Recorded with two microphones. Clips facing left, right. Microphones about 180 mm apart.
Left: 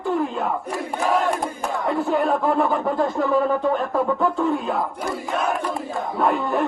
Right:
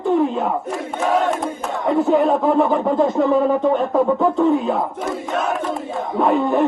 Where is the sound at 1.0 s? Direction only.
Centre (ahead or behind).